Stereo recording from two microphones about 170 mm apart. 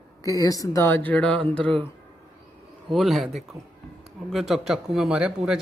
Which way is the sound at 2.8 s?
Centre (ahead or behind).